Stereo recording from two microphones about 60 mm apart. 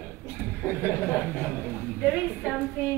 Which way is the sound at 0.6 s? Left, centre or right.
Left.